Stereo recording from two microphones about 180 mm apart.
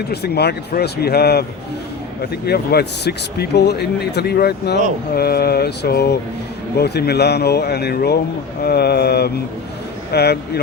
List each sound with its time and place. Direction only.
0.1 s speech: 65° left (ahead or behind)